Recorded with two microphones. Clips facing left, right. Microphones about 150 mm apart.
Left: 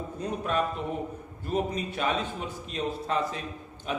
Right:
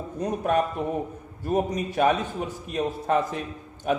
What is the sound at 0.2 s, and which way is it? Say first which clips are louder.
A man's voice: right 5 dB; 45° right (ahead or behind).